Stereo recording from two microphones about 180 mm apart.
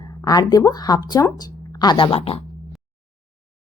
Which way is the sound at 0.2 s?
20° left (ahead or behind).